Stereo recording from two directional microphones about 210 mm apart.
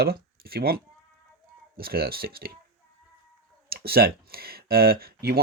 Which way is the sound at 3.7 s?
45° right (ahead or behind).